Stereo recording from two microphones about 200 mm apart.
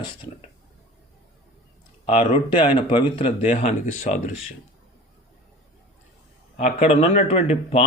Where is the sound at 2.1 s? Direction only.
25° left (ahead or behind).